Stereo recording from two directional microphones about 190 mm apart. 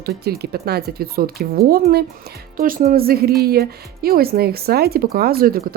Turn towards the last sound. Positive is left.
turn(degrees=-50)  # may be behind; listen again after turning